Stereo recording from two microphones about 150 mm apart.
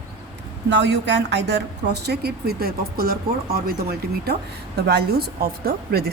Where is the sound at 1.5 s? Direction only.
90° right.